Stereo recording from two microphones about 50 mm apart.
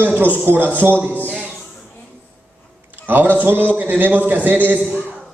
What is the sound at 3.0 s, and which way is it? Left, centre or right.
A man's voice, right.